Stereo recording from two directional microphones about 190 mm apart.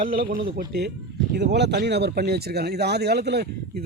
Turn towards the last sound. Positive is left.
turn(degrees=-60)  # may be behind; listen again after turning